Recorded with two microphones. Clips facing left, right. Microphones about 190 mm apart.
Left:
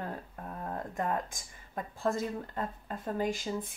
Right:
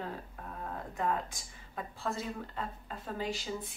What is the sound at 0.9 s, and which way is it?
Speech, 45° left (ahead or behind).